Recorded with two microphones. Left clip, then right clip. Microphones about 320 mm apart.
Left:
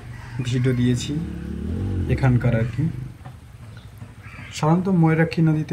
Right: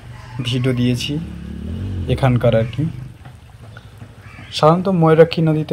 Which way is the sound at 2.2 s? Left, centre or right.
Right.